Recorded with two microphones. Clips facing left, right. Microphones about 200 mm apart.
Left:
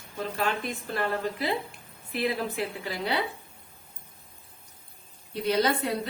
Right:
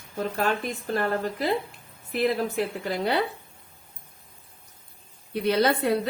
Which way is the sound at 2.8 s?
50° right (ahead or behind).